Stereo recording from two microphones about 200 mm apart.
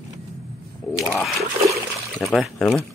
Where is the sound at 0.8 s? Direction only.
5° left (ahead or behind).